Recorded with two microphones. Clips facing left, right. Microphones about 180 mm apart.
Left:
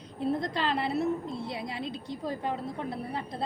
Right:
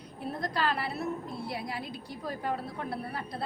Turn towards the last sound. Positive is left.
turn(degrees=20)  # may be behind; listen again after turning